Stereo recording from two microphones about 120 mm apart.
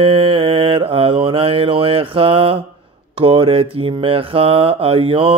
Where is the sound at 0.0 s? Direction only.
50° right (ahead or behind).